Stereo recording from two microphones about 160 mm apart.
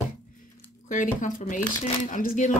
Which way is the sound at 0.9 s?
55° left (ahead or behind).